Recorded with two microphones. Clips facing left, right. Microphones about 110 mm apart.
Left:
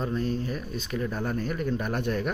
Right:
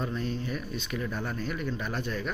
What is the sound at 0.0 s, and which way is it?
Speech, 40° left (ahead or behind).